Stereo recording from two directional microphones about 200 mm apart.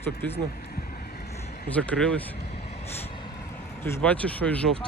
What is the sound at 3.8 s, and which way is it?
Speech, 5° left (ahead or behind).